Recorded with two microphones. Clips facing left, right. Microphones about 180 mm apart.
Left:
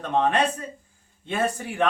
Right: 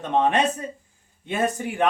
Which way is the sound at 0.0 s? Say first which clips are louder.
Right 1 dB; 20° right (ahead or behind).